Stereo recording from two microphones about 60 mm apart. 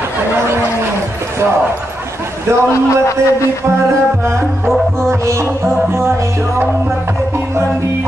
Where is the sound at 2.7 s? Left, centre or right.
Left.